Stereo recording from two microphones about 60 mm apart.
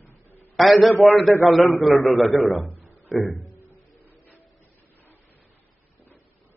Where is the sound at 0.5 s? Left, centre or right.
Centre.